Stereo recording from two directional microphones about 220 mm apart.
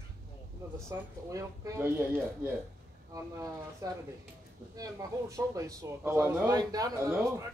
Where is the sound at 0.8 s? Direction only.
15° right (ahead or behind).